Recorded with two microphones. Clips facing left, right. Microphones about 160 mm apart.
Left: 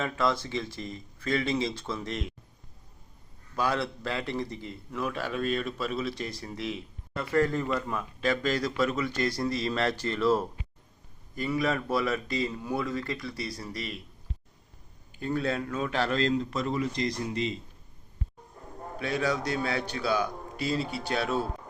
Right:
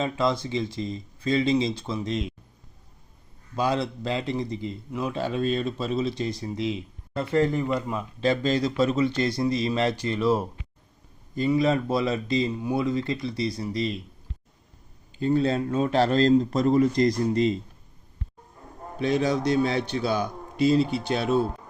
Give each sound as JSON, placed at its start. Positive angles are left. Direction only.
{"t": 0.0, "sound": "speech", "side_deg": -20}
{"t": 3.5, "sound": "speech", "side_deg": -20}
{"t": 15.2, "sound": "speech", "side_deg": -25}
{"t": 18.9, "sound": "speech", "side_deg": -20}